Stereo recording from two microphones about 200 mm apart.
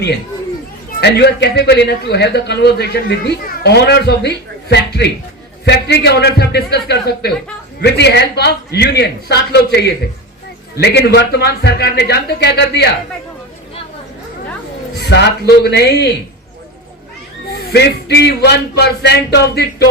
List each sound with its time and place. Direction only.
1.0 s a man's voice: 55° left (ahead or behind)
15.1 s a man's voice: 55° left (ahead or behind)
17.7 s a man's voice: 55° left (ahead or behind)